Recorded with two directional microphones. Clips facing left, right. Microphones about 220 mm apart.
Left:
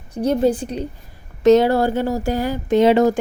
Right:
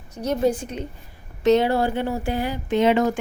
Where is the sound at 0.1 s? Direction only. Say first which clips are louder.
Left 4 dB; 30° left (ahead or behind).